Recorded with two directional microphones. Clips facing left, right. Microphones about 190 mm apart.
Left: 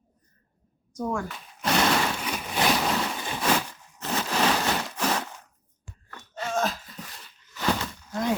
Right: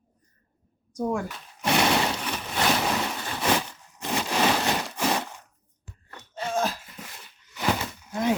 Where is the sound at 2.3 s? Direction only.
10° left (ahead or behind).